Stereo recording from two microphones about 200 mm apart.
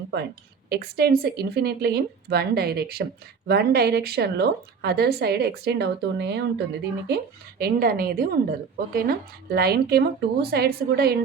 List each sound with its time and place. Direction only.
0.7 s a woman's voice: 50° right (ahead or behind)
7.6 s a woman's voice: 45° right (ahead or behind)